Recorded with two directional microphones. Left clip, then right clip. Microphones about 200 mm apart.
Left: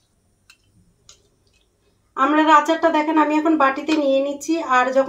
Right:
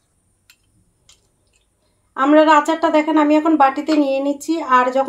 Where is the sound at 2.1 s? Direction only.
50° right (ahead or behind).